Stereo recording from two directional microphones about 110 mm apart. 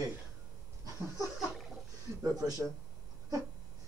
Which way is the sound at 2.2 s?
35° right (ahead or behind).